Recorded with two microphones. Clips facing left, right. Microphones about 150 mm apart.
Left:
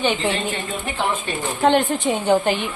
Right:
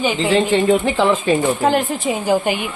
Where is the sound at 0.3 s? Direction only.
90° right.